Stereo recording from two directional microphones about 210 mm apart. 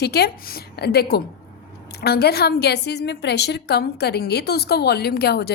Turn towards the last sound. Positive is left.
turn(degrees=50)  # may be behind; listen again after turning